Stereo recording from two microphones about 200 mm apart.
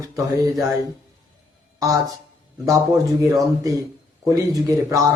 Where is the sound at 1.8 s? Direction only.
15° right (ahead or behind).